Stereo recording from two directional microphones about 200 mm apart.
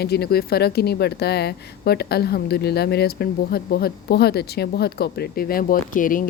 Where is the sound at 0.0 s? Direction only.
50° left (ahead or behind).